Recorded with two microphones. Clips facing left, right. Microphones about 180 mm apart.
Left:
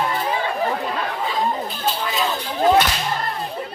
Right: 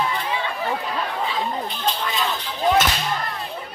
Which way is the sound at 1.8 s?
Centre (ahead or behind).